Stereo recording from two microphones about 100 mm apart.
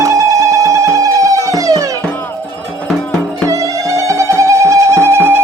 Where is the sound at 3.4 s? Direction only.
35° right (ahead or behind).